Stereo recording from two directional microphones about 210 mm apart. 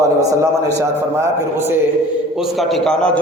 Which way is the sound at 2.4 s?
Centre (ahead or behind).